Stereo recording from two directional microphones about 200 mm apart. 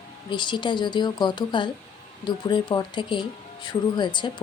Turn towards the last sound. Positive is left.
turn(degrees=25)  # may be behind; listen again after turning